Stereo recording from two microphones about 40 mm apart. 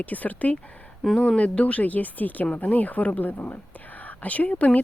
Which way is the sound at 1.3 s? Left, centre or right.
Left.